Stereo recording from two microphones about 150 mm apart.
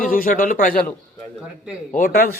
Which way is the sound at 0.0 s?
70° left (ahead or behind).